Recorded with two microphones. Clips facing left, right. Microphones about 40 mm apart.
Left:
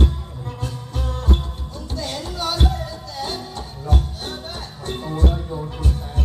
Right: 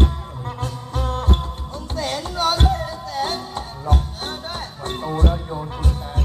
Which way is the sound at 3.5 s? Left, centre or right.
Right.